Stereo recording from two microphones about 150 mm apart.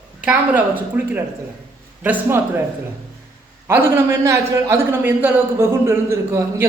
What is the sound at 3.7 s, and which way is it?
A man's voice, 15° right (ahead or behind).